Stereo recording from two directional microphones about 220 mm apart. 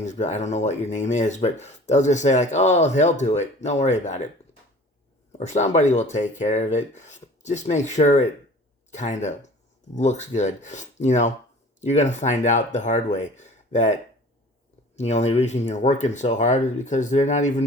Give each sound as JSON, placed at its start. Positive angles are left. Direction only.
{"t": 0.0, "sound": "speech", "side_deg": 35}
{"t": 5.4, "sound": "speech", "side_deg": 30}